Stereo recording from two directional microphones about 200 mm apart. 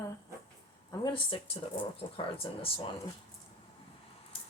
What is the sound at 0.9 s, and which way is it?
Speech, 25° left (ahead or behind).